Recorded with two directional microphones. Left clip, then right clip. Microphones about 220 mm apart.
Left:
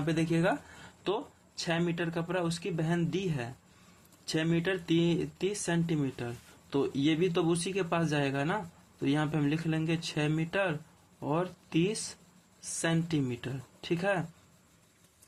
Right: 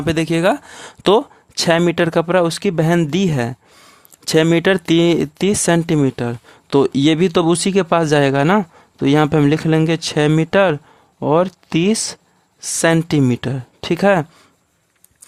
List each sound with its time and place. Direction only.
0.0 s speech: 40° right (ahead or behind)